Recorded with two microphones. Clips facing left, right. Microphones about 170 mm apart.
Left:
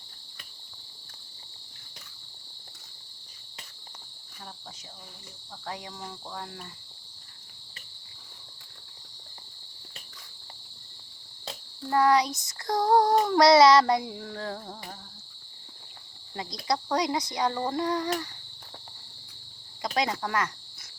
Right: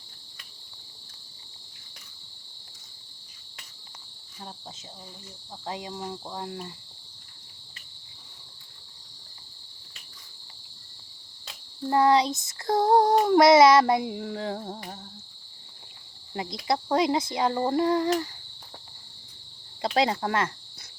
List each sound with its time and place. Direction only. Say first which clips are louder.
5.6 s child singing: right 4 dB; 20° right (ahead or behind)
11.9 s child singing: right 2 dB; 25° right (ahead or behind)
16.3 s child singing: right 2 dB; 20° right (ahead or behind)
19.8 s child singing: right 4 dB; 30° right (ahead or behind)